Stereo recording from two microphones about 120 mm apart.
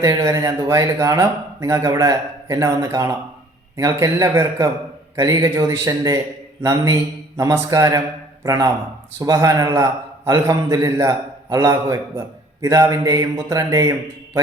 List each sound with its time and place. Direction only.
0.0 s speech: 30° right (ahead or behind)